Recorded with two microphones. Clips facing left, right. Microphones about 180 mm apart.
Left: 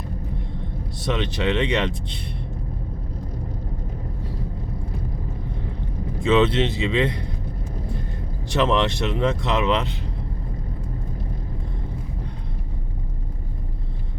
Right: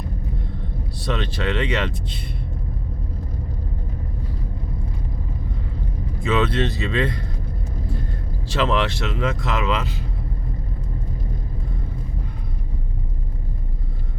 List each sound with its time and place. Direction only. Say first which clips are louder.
1.0 s speech: left 2 dB; 20° left (ahead or behind)
6.2 s speech: left 3 dB; 25° left (ahead or behind)
8.5 s speech: left 1 dB; 20° left (ahead or behind)